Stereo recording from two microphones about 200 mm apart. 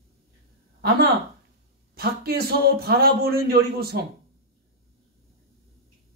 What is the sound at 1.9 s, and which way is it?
A man's voice, 50° right (ahead or behind).